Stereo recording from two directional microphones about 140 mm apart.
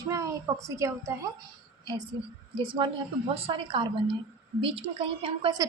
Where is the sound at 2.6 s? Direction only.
35° right (ahead or behind).